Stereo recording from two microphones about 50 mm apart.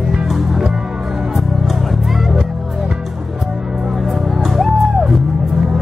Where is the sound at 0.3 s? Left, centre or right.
Centre.